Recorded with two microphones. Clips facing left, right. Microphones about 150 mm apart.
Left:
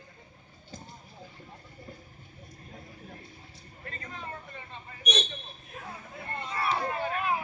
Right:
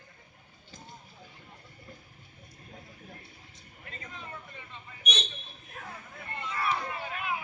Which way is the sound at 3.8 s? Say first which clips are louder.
Left 4 dB; 45° left (ahead or behind).